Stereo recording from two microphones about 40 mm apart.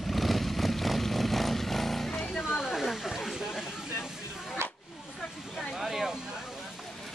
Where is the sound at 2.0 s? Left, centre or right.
Left.